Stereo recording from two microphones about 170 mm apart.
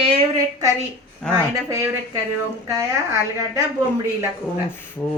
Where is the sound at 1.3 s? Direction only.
15° right (ahead or behind).